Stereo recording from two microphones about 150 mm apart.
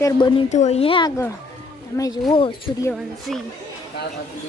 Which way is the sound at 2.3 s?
35° left (ahead or behind).